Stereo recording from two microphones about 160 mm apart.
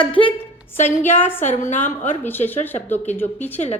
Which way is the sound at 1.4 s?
50° left (ahead or behind).